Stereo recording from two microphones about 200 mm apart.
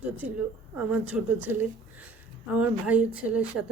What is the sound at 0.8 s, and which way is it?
A woman's voice, 5° right (ahead or behind).